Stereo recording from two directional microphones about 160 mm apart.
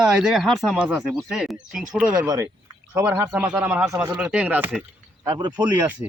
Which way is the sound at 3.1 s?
25° right (ahead or behind).